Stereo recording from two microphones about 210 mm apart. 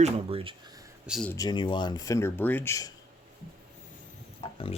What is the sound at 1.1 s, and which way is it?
Speech, centre (ahead or behind).